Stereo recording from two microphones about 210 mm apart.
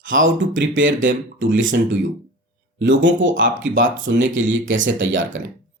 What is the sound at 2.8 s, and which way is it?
Speech, 60° right (ahead or behind).